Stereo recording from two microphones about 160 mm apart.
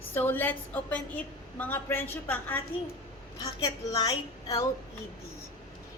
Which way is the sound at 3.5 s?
25° left (ahead or behind).